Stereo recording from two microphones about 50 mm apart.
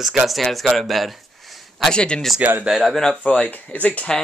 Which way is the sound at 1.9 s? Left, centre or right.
Centre.